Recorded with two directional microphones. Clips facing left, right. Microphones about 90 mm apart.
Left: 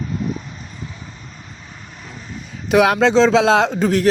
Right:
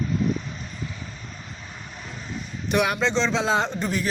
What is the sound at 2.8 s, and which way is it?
A man's voice, 90° left.